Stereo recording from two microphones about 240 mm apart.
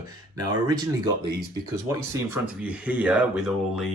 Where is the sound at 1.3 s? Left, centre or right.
Right.